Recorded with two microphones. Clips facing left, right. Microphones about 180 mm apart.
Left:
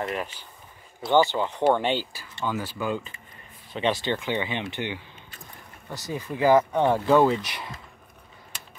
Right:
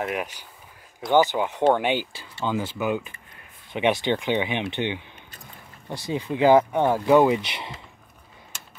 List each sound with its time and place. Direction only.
0.0 s speech: 10° right (ahead or behind)